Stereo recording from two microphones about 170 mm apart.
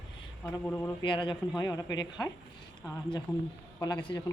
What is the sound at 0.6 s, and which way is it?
Speech, 10° left (ahead or behind).